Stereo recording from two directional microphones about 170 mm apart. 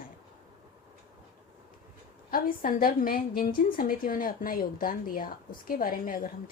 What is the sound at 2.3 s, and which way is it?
A woman's voice, 55° left (ahead or behind).